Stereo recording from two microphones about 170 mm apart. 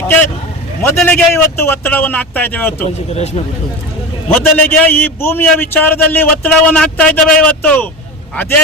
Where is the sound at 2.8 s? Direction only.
40° left (ahead or behind).